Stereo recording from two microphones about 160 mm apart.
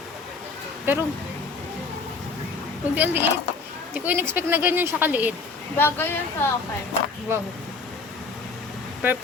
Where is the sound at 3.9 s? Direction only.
10° right (ahead or behind).